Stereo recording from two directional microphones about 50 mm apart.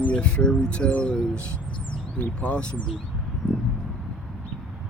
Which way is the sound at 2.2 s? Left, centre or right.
Left.